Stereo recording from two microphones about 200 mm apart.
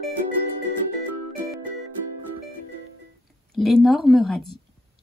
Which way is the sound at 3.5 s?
Centre (ahead or behind).